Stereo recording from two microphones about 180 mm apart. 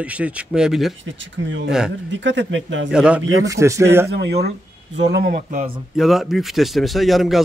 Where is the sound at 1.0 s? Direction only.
90° right.